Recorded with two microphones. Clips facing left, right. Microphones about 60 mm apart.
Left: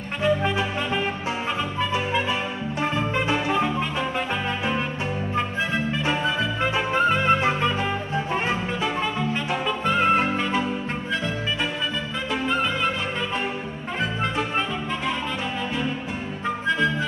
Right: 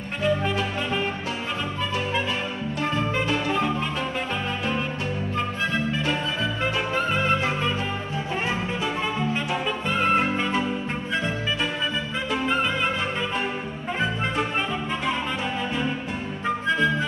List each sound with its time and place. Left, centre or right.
0.2 s music: centre
2.8 s music: centre
6.6 s music: left
8.8 s music: centre
9.9 s music: centre
10.3 s music: centre